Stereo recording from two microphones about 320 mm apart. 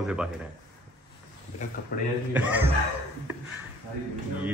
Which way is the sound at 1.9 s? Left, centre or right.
Left.